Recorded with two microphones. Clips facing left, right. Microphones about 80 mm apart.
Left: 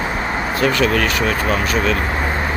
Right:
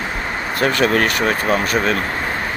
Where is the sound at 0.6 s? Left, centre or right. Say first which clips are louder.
Right 1 dB; right.